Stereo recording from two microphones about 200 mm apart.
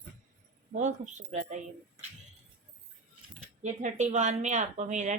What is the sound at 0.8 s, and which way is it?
Speech, 35° right (ahead or behind).